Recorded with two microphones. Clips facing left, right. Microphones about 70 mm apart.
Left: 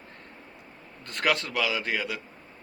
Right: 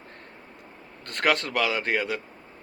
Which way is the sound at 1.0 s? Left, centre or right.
Right.